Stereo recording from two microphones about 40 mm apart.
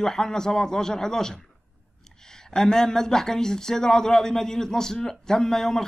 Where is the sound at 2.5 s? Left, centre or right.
Centre.